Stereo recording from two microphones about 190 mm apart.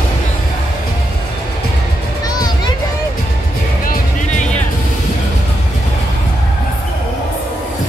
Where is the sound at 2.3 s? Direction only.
20° left (ahead or behind).